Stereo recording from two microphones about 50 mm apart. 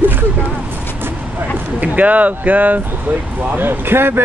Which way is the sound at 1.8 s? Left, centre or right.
Right.